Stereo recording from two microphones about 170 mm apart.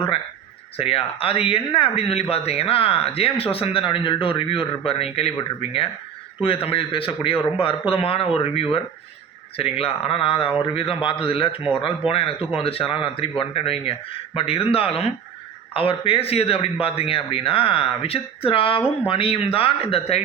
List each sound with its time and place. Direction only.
0.8 s a man's voice: 35° left (ahead or behind)